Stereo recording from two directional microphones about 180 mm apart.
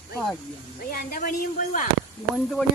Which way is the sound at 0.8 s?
50° left (ahead or behind).